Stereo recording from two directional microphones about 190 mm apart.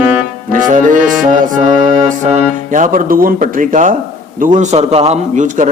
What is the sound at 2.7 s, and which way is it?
Music, 45° right (ahead or behind).